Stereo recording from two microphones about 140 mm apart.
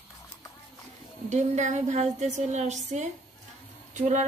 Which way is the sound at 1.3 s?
55° right (ahead or behind).